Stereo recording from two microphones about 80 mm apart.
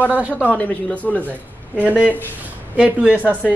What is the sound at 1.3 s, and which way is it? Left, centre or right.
A woman's voice, right.